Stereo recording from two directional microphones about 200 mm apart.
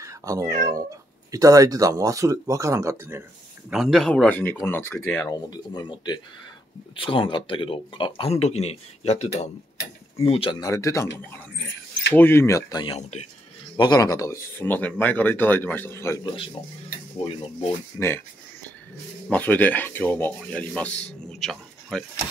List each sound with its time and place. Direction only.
0.0 s cat: 15° right (ahead or behind)
1.3 s speech: 15° right (ahead or behind)
3.7 s speech: centre (ahead or behind)
5.7 s speech: 20° left (ahead or behind)
13.7 s speech: 20° left (ahead or behind)
17.2 s speech: 25° left (ahead or behind)
17.9 s speech: 10° left (ahead or behind)
19.2 s speech: 5° left (ahead or behind)